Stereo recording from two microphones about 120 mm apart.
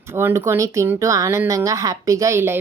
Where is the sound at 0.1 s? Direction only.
20° right (ahead or behind).